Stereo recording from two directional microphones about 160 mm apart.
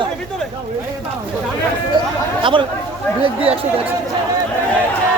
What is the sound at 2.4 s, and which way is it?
Speech, 30° right (ahead or behind).